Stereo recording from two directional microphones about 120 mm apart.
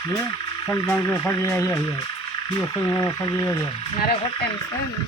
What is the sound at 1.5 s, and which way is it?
Speech, 25° left (ahead or behind).